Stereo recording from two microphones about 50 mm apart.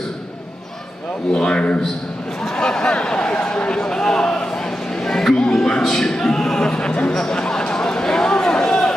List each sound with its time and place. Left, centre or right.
1.3 s a man's voice: centre
2.4 s a sound: centre
5.0 s music: centre